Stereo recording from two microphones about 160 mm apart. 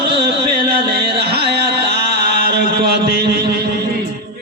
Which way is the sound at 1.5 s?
90° right.